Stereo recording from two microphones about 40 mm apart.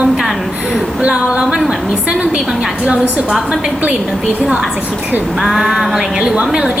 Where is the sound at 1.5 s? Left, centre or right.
Centre.